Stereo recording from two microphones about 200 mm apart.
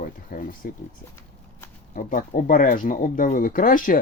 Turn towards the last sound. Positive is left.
turn(degrees=45)  # may be behind; listen again after turning